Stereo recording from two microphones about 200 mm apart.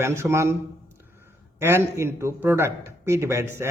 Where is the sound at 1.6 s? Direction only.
10° right (ahead or behind).